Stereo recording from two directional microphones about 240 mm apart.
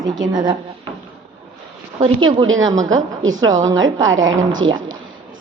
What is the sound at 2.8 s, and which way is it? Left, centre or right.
A woman's voice, right.